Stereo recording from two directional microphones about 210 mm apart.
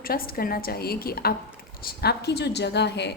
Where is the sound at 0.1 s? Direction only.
45° left (ahead or behind).